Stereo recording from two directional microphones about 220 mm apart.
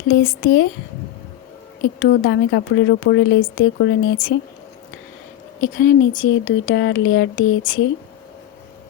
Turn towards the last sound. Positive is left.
turn(degrees=65)  # may be behind; listen again after turning